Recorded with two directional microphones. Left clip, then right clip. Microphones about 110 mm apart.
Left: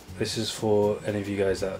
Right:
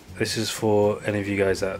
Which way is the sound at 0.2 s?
40° right (ahead or behind).